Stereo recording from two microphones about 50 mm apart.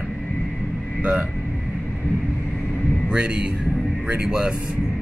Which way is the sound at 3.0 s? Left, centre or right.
Centre.